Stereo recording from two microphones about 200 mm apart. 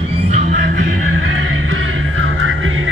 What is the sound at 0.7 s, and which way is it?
Music, 70° right (ahead or behind).